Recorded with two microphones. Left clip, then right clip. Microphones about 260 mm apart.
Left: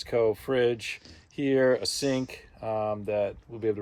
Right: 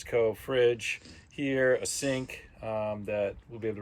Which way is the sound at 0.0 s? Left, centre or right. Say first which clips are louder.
Left 2 dB; left.